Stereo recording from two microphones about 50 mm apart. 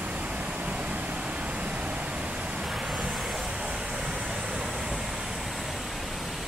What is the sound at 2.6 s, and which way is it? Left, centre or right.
Vehicle, centre.